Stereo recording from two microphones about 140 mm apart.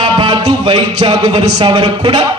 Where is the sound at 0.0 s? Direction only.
35° right (ahead or behind).